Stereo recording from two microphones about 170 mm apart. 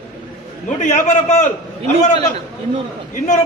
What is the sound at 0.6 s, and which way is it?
Speech, 45° left (ahead or behind).